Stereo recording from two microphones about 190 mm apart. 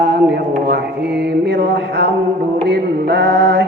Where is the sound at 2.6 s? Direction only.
60° right (ahead or behind).